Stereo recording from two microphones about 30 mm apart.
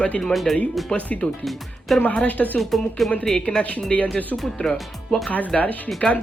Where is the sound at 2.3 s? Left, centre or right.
Left.